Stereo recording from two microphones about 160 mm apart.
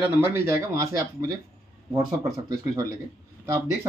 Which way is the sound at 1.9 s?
20° right (ahead or behind).